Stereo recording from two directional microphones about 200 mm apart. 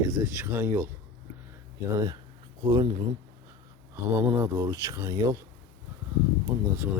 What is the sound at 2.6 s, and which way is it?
Speech, 20° right (ahead or behind).